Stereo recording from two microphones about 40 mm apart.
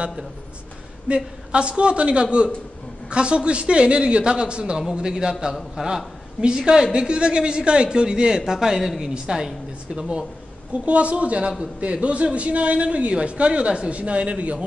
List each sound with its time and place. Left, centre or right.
1.0 s a man's voice: right; by 6.0 s centre
6.4 s a man's voice: right
10.7 s a man's voice: right